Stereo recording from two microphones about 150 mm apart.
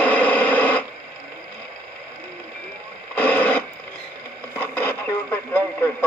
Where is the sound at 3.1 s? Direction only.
10° left (ahead or behind).